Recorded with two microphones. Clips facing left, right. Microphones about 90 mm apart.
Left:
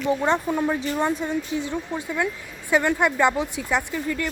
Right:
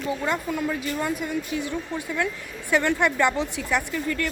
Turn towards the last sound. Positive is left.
turn(degrees=15)  # may be behind; listen again after turning